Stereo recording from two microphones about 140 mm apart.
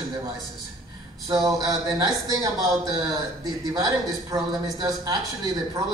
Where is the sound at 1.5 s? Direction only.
25° right (ahead or behind).